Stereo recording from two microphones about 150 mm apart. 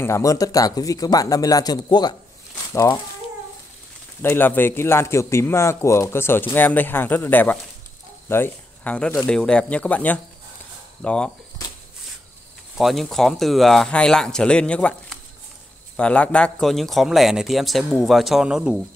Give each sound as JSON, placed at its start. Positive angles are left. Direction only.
{"t": 0.0, "sound": "speech", "side_deg": 20}
{"t": 4.2, "sound": "a man's voice", "side_deg": 15}
{"t": 12.7, "sound": "speech", "side_deg": 0}